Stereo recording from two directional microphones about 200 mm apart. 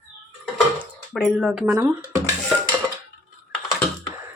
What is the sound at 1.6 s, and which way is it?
Speech, 10° right (ahead or behind).